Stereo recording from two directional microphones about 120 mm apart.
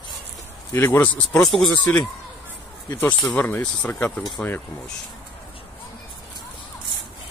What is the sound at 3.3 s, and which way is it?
Speech, 15° left (ahead or behind).